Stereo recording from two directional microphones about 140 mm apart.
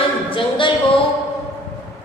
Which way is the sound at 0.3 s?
40° left (ahead or behind).